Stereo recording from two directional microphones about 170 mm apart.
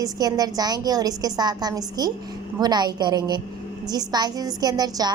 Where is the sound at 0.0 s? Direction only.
20° right (ahead or behind).